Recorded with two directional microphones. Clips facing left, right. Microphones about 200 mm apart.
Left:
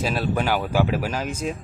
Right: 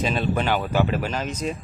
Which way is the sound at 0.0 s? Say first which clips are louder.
Even; 5° left (ahead or behind).